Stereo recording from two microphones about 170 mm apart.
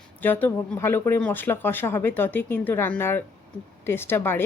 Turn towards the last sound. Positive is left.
turn(degrees=15)  # may be behind; listen again after turning